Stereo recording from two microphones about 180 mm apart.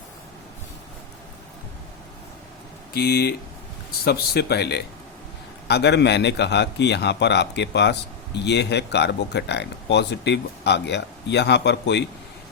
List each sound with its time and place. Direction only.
2.9 s speech: 60° left (ahead or behind)